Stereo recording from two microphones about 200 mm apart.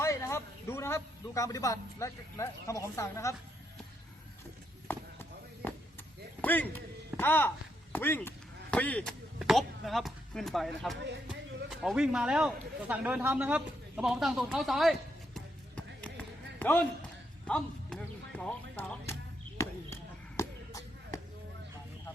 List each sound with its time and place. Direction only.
0.0 s a man's voice: 15° left (ahead or behind)
4.9 s a sound: 10° left (ahead or behind)
6.4 s speech: 10° left (ahead or behind)
15.4 s a sound: 5° left (ahead or behind)
17.4 s music: 5° left (ahead or behind)
19.5 s basketball bounce: 15° left (ahead or behind)